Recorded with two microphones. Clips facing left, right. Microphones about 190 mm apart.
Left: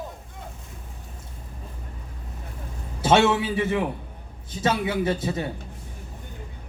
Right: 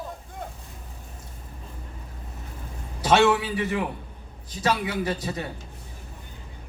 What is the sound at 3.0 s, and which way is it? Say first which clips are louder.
A man's voice: left 1 dB; 25° left (ahead or behind).